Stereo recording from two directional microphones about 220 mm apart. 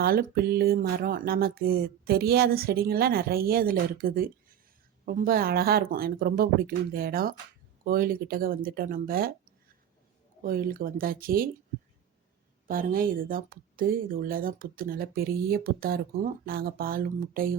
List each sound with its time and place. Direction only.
0.0 s a sound: 45° right (ahead or behind)
7.9 s speech: 40° right (ahead or behind)
10.4 s speech: 40° right (ahead or behind)
12.6 s speech: 40° right (ahead or behind)